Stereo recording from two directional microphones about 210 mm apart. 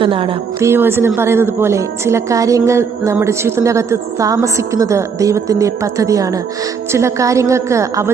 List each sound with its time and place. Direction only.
0.0 s music: 25° right (ahead or behind)
0.6 s a woman's voice: 10° right (ahead or behind)